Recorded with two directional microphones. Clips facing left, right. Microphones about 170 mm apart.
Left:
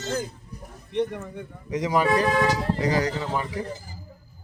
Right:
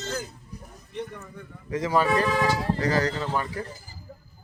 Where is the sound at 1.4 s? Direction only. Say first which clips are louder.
Even; 20° left (ahead or behind).